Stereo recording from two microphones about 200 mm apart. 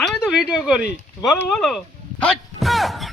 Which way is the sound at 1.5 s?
Centre (ahead or behind).